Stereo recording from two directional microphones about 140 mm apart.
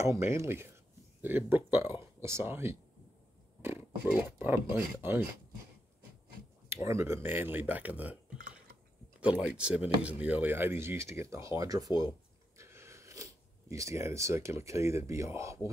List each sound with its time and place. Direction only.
0.0 s speech: 20° right (ahead or behind)
6.7 s speech: 20° right (ahead or behind)
9.5 s speech: 10° right (ahead or behind)